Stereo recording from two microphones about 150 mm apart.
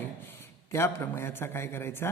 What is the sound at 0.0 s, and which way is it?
A man's voice, 15° left (ahead or behind).